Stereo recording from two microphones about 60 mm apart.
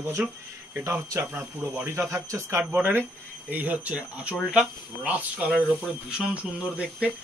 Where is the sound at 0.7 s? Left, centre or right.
Right.